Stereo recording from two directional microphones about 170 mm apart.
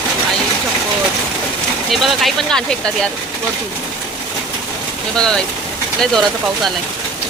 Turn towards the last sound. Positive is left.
turn(degrees=0)  # may be behind; listen again after turning